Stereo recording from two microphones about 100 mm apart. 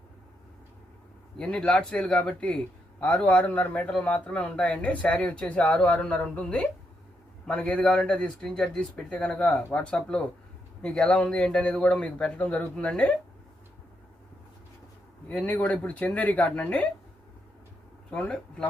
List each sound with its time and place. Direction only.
1.4 s a man's voice: 10° left (ahead or behind)
15.3 s a man's voice: 15° left (ahead or behind)
18.1 s a man's voice: 10° left (ahead or behind)